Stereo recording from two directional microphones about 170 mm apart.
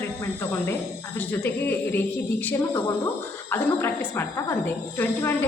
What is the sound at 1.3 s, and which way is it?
A woman's voice, 10° left (ahead or behind).